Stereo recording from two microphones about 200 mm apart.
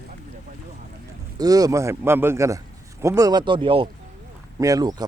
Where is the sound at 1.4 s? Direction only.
20° right (ahead or behind).